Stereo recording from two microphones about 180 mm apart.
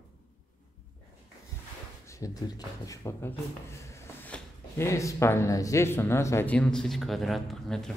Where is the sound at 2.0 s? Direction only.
15° left (ahead or behind).